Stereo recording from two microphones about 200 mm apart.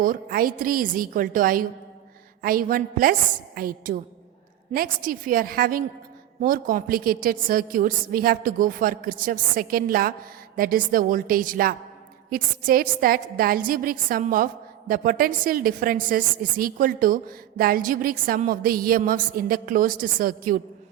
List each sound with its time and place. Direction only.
0.0 s a woman's voice: 45° right (ahead or behind)